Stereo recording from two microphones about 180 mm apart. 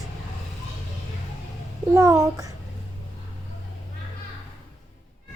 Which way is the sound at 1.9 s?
15° right (ahead or behind).